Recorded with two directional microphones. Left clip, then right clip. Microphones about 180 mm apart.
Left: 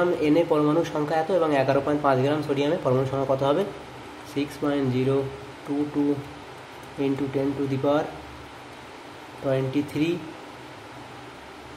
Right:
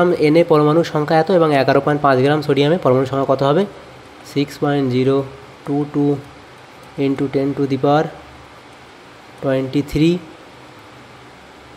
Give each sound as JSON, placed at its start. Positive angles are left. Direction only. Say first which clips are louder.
{"t": 0.0, "sound": "speech", "louder": "right 8 dB", "side_deg": -40}
{"t": 9.5, "sound": "speech", "louder": "right 7 dB", "side_deg": -40}